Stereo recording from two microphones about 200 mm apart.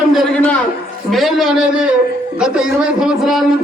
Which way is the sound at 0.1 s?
5° left (ahead or behind).